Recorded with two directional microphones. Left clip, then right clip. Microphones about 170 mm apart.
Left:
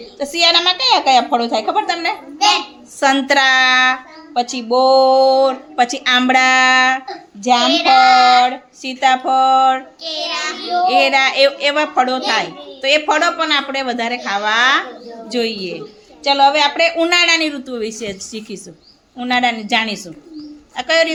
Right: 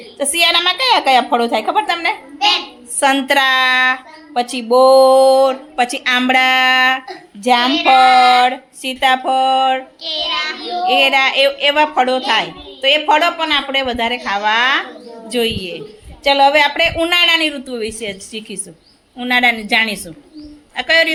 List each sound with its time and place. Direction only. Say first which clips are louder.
0.2 s a woman's voice: even; 15° right (ahead or behind)
3.0 s a woman's voice: even; centre (ahead or behind)
4.4 s a woman's voice: right 3 dB; 15° right (ahead or behind)
7.4 s a woman's voice: even; 15° right (ahead or behind)
10.0 s child singing: right 2 dB; 55° left (ahead or behind)
10.8 s a woman's voice: right 1 dB; centre (ahead or behind)
16.2 s a woman's voice: right 1 dB; 20° right (ahead or behind)